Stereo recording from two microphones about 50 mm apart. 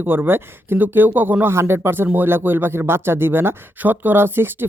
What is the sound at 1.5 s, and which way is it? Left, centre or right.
Speech, right.